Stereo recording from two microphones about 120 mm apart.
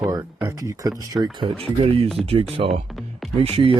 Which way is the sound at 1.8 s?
50° right (ahead or behind).